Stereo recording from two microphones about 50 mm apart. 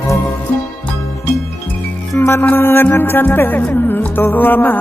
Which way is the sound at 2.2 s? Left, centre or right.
Left.